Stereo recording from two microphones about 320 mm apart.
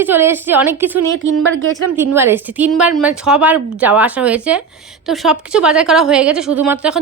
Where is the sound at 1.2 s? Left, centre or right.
Right.